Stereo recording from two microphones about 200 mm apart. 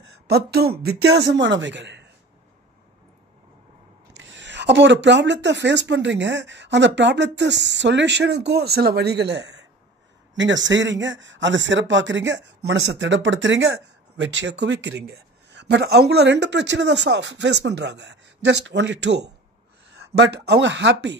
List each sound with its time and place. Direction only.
0.0 s a man's voice: 55° right (ahead or behind)
4.1 s a man's voice: 65° right (ahead or behind)